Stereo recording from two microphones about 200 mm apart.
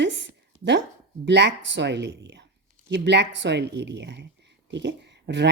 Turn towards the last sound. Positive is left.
turn(degrees=-60)  # may be behind; listen again after turning